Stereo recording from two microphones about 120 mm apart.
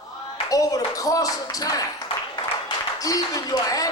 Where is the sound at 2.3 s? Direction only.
35° left (ahead or behind).